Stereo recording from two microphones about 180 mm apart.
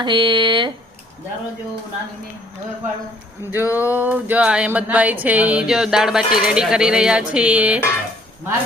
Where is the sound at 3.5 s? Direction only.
10° right (ahead or behind).